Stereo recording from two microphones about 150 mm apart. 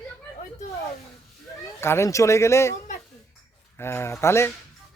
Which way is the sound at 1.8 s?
15° left (ahead or behind).